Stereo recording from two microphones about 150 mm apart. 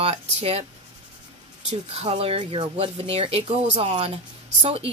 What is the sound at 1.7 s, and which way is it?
Speech, 40° right (ahead or behind).